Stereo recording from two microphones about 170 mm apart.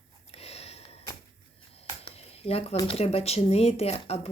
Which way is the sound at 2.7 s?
35° left (ahead or behind).